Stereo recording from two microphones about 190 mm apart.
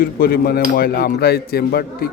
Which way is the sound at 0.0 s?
50° left (ahead or behind).